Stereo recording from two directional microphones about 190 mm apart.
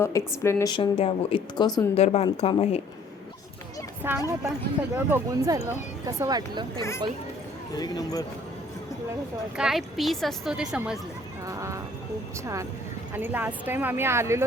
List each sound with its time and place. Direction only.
0.0 s speech: 15° left (ahead or behind)
2.0 s speech: 35° left (ahead or behind)
4.0 s speech: 10° right (ahead or behind)
7.8 s speech: 20° left (ahead or behind)
9.6 s a woman's voice: centre (ahead or behind)
11.4 s speech: 15° right (ahead or behind)
13.1 s speech: 10° right (ahead or behind)